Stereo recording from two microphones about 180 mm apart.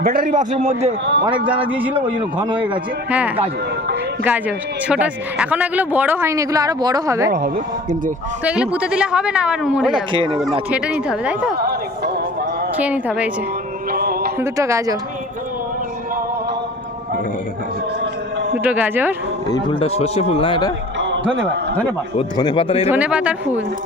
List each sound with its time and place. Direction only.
0.0 s a man's voice: 55° right (ahead or behind)
3.1 s a man's voice: 10° right (ahead or behind)
7.3 s speech: 60° right (ahead or behind)
8.4 s a woman's voice: 5° right (ahead or behind)
10.1 s speech: 25° right (ahead or behind)
10.7 s a woman's voice: 5° right (ahead or behind)
11.5 s a sound: 60° right (ahead or behind)
12.7 s a man's voice: 10° right (ahead or behind)
13.9 s music: 60° right (ahead or behind)
14.3 s a man's voice: 15° right (ahead or behind)
18.6 s a man's voice: 10° right (ahead or behind)
19.5 s speech: 30° left (ahead or behind)
22.2 s a man's voice: 25° left (ahead or behind)
22.9 s a man's voice: 5° right (ahead or behind)